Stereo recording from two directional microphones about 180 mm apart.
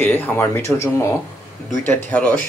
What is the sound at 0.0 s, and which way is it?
Speech, 10° left (ahead or behind).